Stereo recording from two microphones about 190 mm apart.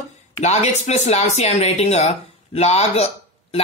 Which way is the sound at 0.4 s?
35° left (ahead or behind).